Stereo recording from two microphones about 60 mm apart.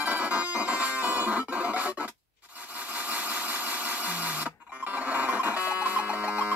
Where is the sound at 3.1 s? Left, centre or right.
Right.